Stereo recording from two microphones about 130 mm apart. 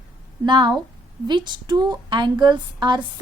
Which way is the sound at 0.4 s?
35° right (ahead or behind).